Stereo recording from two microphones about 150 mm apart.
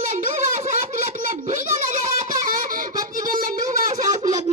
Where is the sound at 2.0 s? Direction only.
65° right (ahead or behind).